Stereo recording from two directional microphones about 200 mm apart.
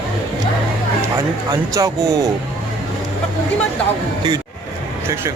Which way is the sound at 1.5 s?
15° right (ahead or behind).